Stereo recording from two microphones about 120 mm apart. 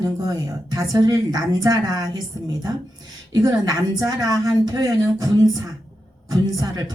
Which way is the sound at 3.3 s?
30° right (ahead or behind).